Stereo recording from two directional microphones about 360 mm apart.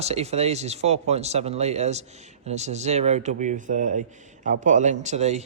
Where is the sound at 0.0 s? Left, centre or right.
Centre.